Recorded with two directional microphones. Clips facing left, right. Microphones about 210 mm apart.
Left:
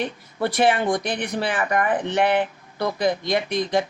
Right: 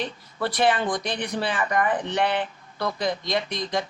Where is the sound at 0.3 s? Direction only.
15° left (ahead or behind).